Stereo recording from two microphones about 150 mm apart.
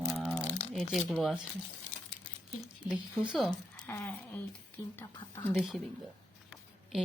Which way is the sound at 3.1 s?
Centre (ahead or behind).